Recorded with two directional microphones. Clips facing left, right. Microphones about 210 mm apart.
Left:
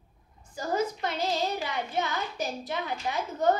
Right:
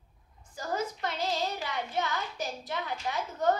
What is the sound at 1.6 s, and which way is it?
A child's voice, 20° left (ahead or behind).